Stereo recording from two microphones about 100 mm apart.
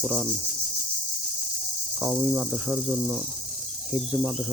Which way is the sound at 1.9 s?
15° right (ahead or behind).